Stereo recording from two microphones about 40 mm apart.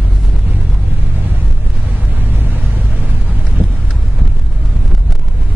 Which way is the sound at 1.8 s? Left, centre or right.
Right.